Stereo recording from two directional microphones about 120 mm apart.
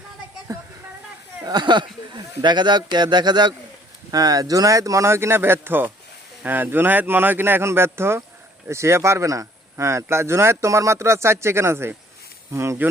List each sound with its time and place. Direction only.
1.5 s a man's voice: 35° right (ahead or behind); by 12.9 s 20° right (ahead or behind)